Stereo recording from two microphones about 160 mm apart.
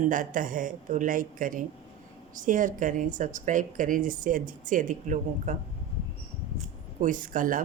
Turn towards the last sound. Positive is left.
turn(degrees=-60)  # may be behind; listen again after turning